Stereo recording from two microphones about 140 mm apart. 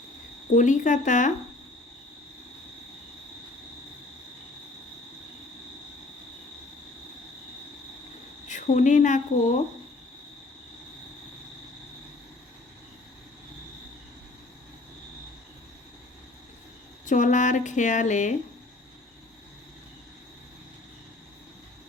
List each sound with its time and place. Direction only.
0.5 s speech: 65° left (ahead or behind)
8.4 s a woman's voice: 60° left (ahead or behind)
17.1 s speech: 65° left (ahead or behind)